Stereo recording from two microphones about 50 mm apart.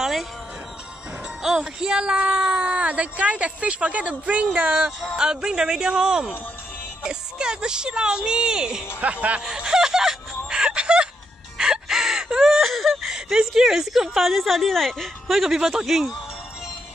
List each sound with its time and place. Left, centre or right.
0.0 s music: centre
1.4 s speech: centre
9.0 s speech: right
9.4 s a sound: centre
11.5 s wail: centre
12.4 s a sound: centre
13.1 s a sound: centre
13.6 s a woman's voice: centre
15.3 s speech: centre